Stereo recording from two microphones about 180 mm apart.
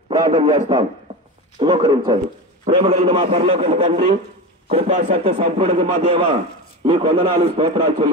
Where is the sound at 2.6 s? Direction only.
35° right (ahead or behind).